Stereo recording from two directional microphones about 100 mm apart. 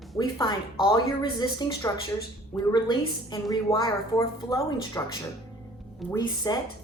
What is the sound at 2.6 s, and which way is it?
A woman's voice, 50° left (ahead or behind).